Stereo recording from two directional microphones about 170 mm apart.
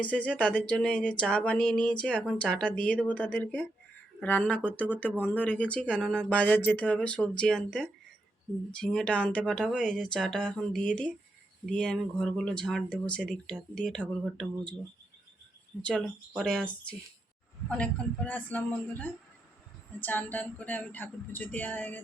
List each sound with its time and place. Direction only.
0.0 s speech: 10° left (ahead or behind)
15.8 s speech: 5° left (ahead or behind)
17.7 s speech: 5° left (ahead or behind)